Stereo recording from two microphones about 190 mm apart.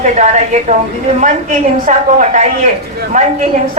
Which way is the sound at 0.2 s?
40° right (ahead or behind).